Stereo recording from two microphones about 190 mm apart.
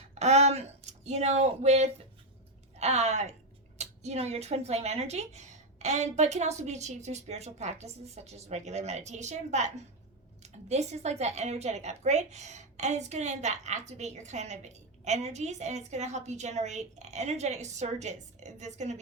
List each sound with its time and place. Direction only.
0.1 s speech: 35° right (ahead or behind)